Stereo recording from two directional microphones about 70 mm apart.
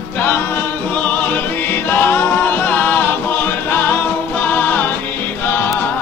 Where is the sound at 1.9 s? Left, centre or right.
Left.